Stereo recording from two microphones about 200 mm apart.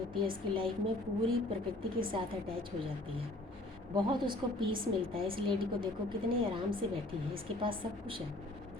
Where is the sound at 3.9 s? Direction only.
20° right (ahead or behind).